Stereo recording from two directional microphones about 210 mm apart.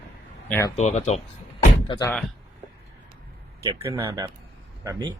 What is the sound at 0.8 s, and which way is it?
Speech, 30° left (ahead or behind).